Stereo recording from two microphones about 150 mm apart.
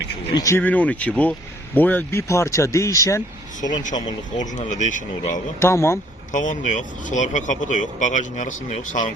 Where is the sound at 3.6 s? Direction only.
55° left (ahead or behind).